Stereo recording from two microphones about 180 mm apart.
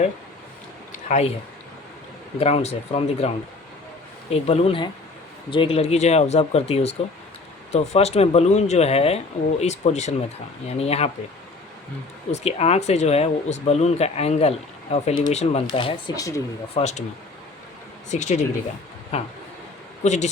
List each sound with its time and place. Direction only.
0.9 s a sound: 40° left (ahead or behind)
2.4 s speech: 35° left (ahead or behind)
12.3 s speech: 35° left (ahead or behind); by 16.4 s 20° left (ahead or behind)
16.7 s speech: 40° left (ahead or behind)
18.1 s speech: 40° left (ahead or behind)